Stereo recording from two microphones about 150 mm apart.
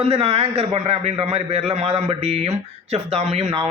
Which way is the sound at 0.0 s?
40° right (ahead or behind).